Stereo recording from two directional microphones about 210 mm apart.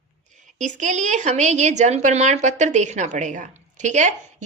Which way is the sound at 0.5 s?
35° right (ahead or behind).